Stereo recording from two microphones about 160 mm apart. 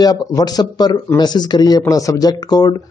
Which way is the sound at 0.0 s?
25° left (ahead or behind).